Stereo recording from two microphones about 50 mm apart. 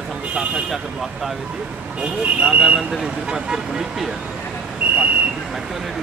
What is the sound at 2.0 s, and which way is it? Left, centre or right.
Speech, right.